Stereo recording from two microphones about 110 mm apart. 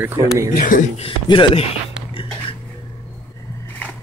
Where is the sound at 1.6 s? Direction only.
55° left (ahead or behind).